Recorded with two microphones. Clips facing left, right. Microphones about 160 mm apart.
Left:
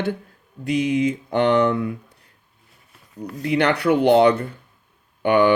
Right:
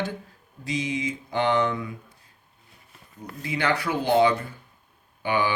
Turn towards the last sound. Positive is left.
turn(degrees=65)  # may be behind; listen again after turning